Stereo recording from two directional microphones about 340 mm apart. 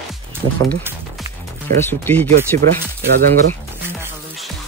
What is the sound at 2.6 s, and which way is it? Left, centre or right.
Speech, right.